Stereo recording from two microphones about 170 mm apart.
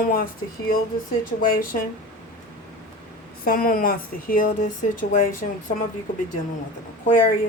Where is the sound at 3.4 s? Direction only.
55° left (ahead or behind).